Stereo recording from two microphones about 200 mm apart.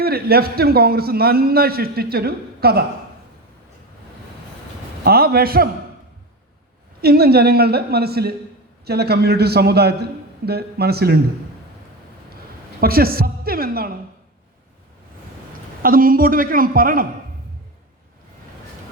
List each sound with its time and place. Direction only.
0.0 s a man's voice: 50° right (ahead or behind)
5.0 s a man's voice: 50° right (ahead or behind)
7.0 s a man's voice: 50° right (ahead or behind)
12.8 s a man's voice: 50° right (ahead or behind)
15.8 s a man's voice: 45° right (ahead or behind)